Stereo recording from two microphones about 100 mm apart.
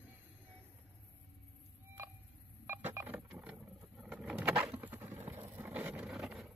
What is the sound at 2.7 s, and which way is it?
Vehicle, 20° right (ahead or behind).